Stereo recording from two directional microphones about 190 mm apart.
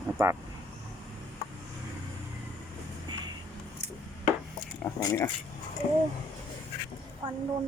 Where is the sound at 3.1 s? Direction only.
20° right (ahead or behind).